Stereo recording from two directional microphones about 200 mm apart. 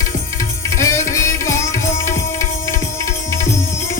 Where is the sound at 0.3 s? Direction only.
15° left (ahead or behind).